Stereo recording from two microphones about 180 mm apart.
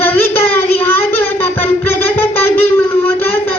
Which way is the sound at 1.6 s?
10° left (ahead or behind).